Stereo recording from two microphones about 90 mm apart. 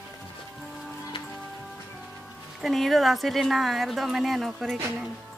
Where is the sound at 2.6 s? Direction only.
Centre (ahead or behind).